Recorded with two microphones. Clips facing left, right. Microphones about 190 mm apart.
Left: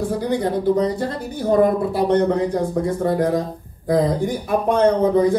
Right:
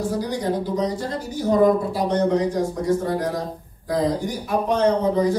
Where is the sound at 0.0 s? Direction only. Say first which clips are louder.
Left 3 dB; 60° left (ahead or behind).